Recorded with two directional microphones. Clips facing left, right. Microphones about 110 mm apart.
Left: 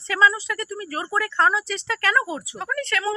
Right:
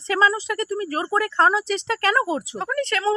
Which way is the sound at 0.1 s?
35° right (ahead or behind).